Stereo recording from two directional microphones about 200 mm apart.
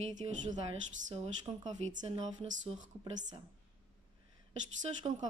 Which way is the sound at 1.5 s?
25° right (ahead or behind).